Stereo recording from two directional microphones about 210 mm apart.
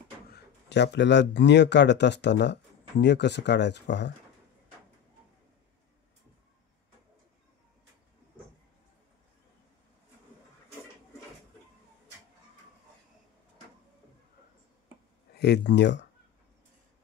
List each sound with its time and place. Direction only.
0.3 s speech: 55° left (ahead or behind)
15.3 s speech: 55° left (ahead or behind)